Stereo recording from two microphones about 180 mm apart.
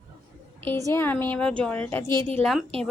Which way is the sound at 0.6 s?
10° left (ahead or behind).